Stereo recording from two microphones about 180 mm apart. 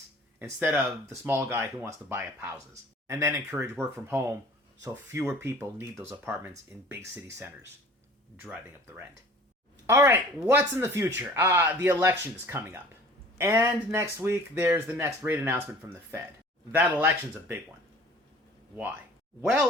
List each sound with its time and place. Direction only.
0.3 s speech: 15° right (ahead or behind)
9.8 s speech: 10° right (ahead or behind)
19.4 s speech: 5° right (ahead or behind)